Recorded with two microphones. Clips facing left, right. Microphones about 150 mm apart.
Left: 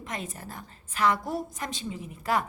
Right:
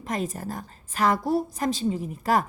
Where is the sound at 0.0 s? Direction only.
40° right (ahead or behind).